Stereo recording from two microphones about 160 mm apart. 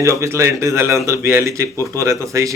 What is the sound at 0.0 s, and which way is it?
Speech, 20° right (ahead or behind).